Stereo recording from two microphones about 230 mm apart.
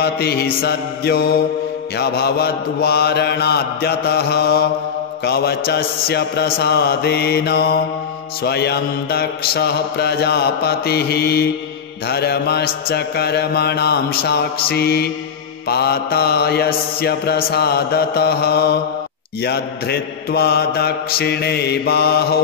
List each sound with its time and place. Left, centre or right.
0.0 s mantra: left